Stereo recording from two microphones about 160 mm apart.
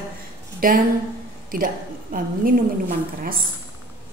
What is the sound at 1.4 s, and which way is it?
A woman's voice, 60° right (ahead or behind).